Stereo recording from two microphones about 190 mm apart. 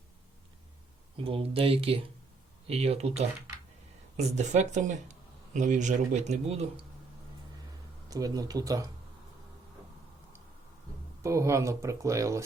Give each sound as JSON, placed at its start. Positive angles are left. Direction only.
{"t": 1.1, "sound": "speech", "side_deg": -30}
{"t": 4.2, "sound": "speech", "side_deg": -35}
{"t": 8.1, "sound": "speech", "side_deg": -20}
{"t": 11.2, "sound": "speech", "side_deg": -15}